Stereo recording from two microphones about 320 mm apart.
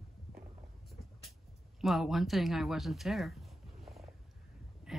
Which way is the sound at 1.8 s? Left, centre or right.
Centre.